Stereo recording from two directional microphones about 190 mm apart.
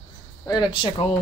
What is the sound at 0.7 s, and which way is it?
Speech, 25° left (ahead or behind).